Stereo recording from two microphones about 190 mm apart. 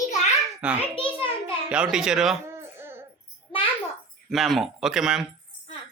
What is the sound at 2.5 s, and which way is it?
Baby cry, 15° right (ahead or behind).